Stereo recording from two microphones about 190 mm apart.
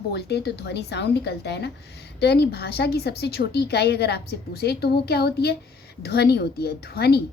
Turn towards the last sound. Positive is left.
turn(degrees=55)  # may be behind; listen again after turning